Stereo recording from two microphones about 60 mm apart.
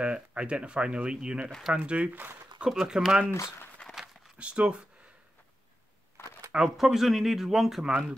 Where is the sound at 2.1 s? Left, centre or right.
Right.